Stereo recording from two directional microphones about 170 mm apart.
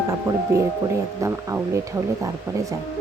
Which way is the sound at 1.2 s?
15° right (ahead or behind).